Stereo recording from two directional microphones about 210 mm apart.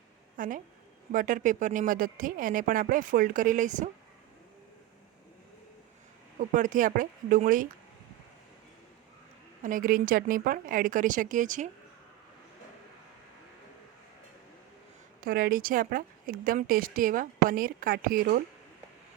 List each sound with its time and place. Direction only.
0.3 s a woman's voice: 40° right (ahead or behind)
6.5 s speech: 40° right (ahead or behind)
9.6 s speech: 40° right (ahead or behind)
15.2 s speech: 45° right (ahead or behind)